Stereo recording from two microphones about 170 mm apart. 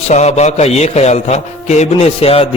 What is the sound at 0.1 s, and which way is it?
A man's voice, 40° left (ahead or behind).